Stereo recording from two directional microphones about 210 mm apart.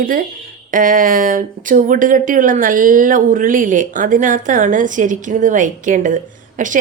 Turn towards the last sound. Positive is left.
turn(degrees=-40)  # may be behind; listen again after turning